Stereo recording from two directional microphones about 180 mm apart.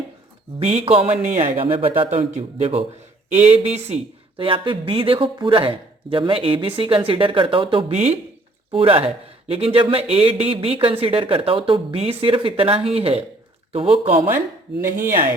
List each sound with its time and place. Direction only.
0.6 s a man's voice: 40° right (ahead or behind)
1.2 s speech: 45° right (ahead or behind)
1.6 s a man's voice: 30° right (ahead or behind)